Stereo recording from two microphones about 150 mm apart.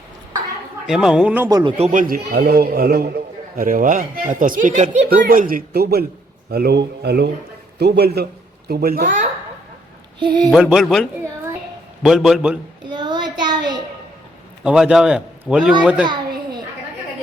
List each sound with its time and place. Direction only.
0.9 s a man's voice: 5° right (ahead or behind)
1.5 s speech: 25° right (ahead or behind)
1.8 s a man's voice: 60° right (ahead or behind); by 9.0 s 85° right
9.0 s a sound: 55° right (ahead or behind)
10.5 s a man's voice: 5° right (ahead or behind)
12.9 s child singing: 30° right (ahead or behind)
14.6 s a man's voice: 5° right (ahead or behind)